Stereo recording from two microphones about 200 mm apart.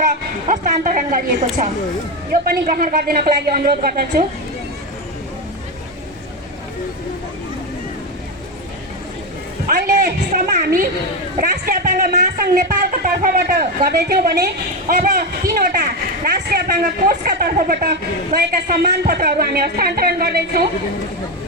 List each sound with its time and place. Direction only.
0.0 s a woman's voice: 40° right (ahead or behind)
9.6 s speech: 45° right (ahead or behind)